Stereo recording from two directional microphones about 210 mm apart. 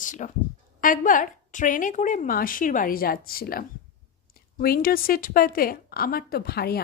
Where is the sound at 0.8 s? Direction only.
40° left (ahead or behind).